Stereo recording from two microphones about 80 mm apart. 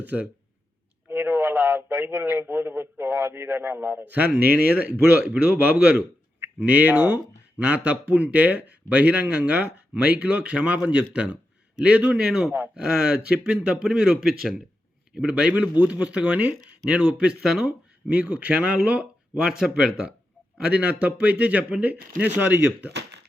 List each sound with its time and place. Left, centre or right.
0.0 s a man's voice: centre
1.0 s a sound: right
1.3 s a man's voice: right